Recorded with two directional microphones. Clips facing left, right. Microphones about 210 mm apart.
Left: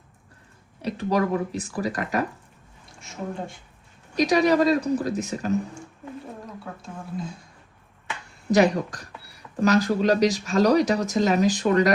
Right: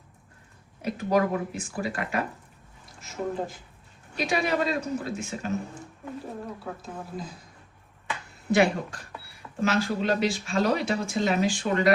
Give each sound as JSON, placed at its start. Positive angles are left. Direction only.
{"t": 0.8, "sound": "speech", "side_deg": 35}
{"t": 2.9, "sound": "speech", "side_deg": 0}
{"t": 4.1, "sound": "speech", "side_deg": 40}
{"t": 6.8, "sound": "speech", "side_deg": 0}
{"t": 8.4, "sound": "speech", "side_deg": 40}